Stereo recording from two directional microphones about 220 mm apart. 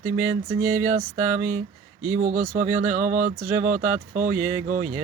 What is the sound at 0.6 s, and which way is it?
Speech, 35° right (ahead or behind).